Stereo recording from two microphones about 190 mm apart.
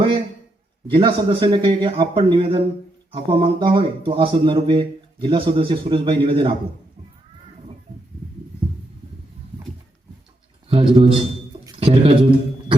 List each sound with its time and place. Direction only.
0.9 s speech: 25° right (ahead or behind)
10.7 s speech: 30° right (ahead or behind)